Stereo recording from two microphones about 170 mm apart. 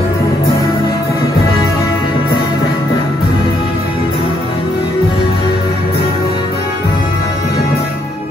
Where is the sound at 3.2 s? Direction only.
65° left (ahead or behind).